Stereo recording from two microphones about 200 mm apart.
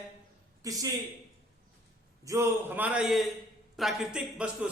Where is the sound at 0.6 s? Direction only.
20° right (ahead or behind).